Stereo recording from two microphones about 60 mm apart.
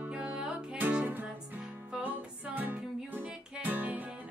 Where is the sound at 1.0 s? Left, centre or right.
Right.